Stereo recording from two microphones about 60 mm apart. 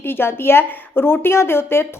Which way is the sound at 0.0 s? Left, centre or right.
Left.